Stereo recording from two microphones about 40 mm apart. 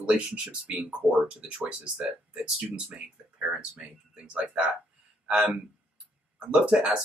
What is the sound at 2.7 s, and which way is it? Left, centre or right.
Speech, right.